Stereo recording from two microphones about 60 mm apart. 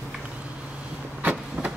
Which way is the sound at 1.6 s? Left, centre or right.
Right.